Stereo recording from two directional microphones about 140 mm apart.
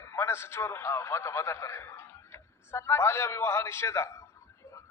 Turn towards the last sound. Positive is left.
turn(degrees=20)  # may be behind; listen again after turning